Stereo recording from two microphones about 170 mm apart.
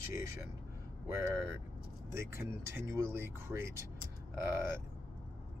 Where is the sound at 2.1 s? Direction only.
15° right (ahead or behind).